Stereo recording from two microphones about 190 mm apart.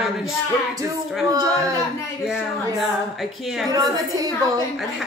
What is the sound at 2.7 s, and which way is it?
Speech, centre (ahead or behind).